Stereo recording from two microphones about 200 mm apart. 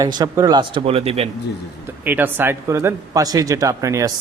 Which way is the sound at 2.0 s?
10° right (ahead or behind).